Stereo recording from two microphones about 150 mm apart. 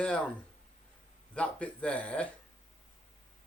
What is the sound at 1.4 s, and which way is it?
Speech, 10° left (ahead or behind).